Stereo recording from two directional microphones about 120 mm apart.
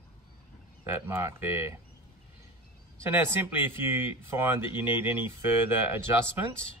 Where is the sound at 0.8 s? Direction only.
20° right (ahead or behind).